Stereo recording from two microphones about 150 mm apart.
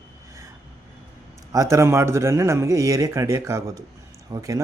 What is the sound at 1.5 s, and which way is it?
A man's voice, 20° right (ahead or behind).